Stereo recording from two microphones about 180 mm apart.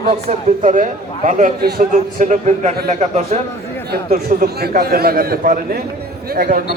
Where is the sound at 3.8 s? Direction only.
55° right (ahead or behind).